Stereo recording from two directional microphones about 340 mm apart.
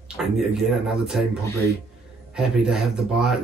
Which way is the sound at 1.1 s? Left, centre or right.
Centre.